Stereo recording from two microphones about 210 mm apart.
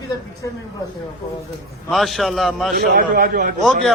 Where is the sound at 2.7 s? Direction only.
45° right (ahead or behind).